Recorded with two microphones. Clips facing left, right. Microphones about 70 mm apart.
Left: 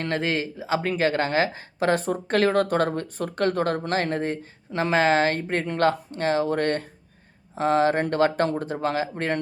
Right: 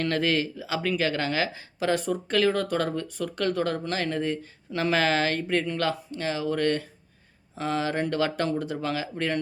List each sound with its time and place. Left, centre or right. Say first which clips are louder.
0.0 s speech: right 1 dB; left